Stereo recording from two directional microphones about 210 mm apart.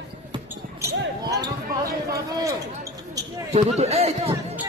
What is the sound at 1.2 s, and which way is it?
Basketball bounce, 15° right (ahead or behind).